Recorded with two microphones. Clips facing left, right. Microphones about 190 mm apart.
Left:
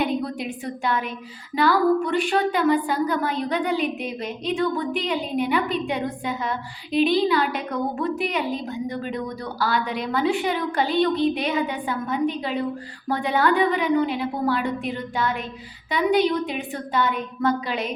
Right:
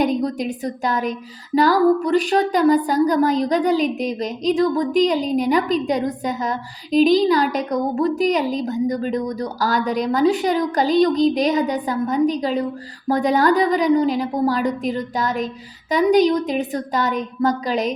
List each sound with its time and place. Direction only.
0.0 s a woman's voice: 40° right (ahead or behind)